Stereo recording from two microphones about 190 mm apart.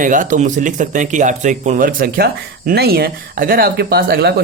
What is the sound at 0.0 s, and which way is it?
Speech, 45° right (ahead or behind).